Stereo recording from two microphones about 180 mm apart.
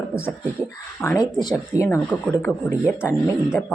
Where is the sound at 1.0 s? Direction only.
15° left (ahead or behind).